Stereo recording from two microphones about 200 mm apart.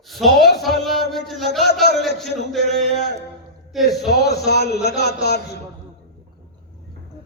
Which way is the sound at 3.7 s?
Centre (ahead or behind).